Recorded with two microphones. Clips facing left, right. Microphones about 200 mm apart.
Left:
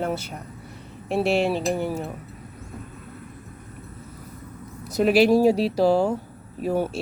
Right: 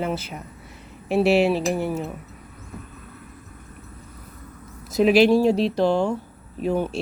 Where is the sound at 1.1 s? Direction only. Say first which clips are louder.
Right 3 dB; centre (ahead or behind).